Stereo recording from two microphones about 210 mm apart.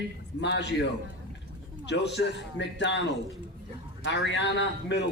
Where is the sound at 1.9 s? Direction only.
55° left (ahead or behind).